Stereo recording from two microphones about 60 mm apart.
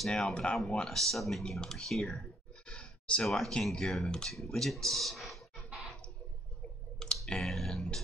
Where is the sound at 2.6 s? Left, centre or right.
Centre.